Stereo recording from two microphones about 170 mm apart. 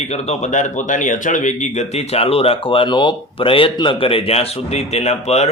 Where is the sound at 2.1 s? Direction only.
35° left (ahead or behind).